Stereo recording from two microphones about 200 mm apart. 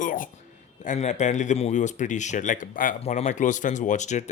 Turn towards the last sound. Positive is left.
turn(degrees=35)  # may be behind; listen again after turning